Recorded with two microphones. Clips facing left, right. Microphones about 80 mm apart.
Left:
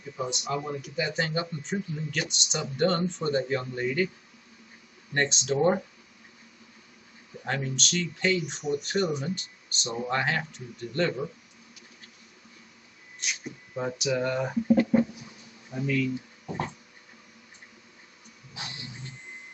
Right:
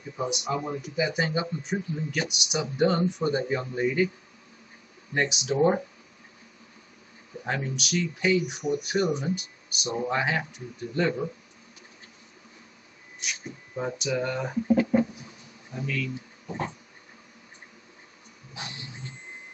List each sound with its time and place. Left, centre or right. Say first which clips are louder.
0.2 s speech: right 2 dB; centre
5.1 s speech: even; centre
7.4 s speech: even; centre
13.2 s speech: even; centre
15.7 s speech: left 4 dB; centre